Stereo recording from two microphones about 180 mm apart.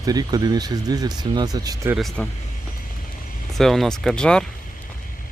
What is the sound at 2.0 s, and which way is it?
Speech, centre (ahead or behind).